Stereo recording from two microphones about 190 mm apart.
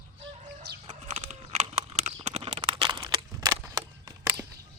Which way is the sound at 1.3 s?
35° right (ahead or behind).